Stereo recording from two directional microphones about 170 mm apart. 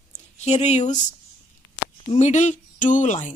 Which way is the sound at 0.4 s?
40° left (ahead or behind).